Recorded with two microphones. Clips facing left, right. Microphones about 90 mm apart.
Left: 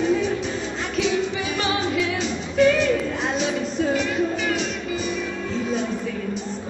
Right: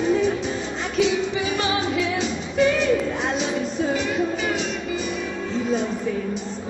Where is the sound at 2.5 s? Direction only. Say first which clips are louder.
Left 2 dB; centre (ahead or behind).